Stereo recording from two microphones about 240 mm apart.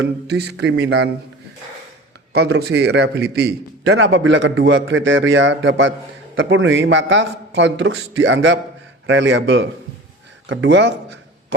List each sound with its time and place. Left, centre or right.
0.0 s a man's voice: right
2.3 s a man's voice: right